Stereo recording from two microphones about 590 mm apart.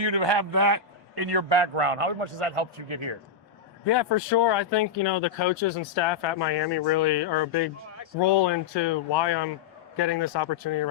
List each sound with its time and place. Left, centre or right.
0.0 s a man's voice: right
3.8 s speech: left